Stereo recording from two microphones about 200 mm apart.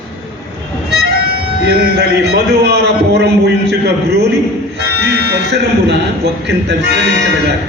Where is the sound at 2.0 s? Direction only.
55° right (ahead or behind).